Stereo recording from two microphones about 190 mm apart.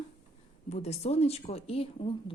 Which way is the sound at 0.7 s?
35° left (ahead or behind).